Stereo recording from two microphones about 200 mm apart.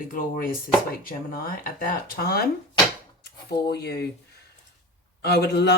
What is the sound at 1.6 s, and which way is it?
Speech, 45° left (ahead or behind).